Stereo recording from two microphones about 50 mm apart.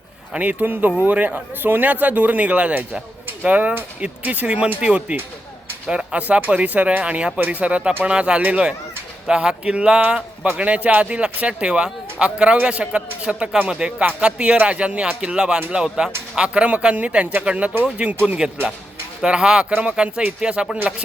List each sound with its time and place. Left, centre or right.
0.3 s speech: right
19.7 s speech: right